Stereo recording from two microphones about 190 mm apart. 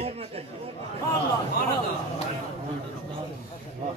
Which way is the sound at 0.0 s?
30° right (ahead or behind).